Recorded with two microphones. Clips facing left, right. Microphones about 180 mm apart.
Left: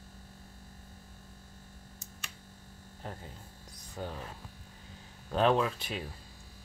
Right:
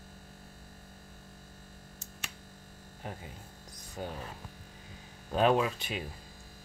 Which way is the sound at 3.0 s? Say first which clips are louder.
Right 1 dB; 15° right (ahead or behind).